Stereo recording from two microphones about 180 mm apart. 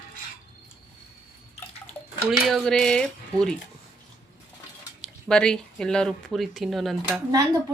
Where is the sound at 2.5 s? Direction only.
5° left (ahead or behind).